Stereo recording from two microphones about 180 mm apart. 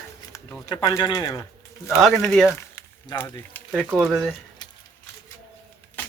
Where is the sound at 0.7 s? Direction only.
20° left (ahead or behind).